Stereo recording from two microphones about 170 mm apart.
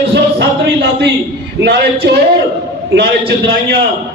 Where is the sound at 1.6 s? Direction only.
70° right (ahead or behind).